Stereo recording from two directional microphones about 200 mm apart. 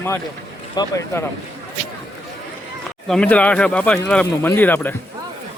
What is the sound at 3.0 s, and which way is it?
Speech, 5° left (ahead or behind).